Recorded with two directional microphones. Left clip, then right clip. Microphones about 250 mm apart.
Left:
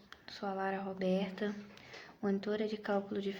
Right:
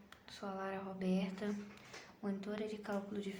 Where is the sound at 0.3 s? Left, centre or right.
Centre.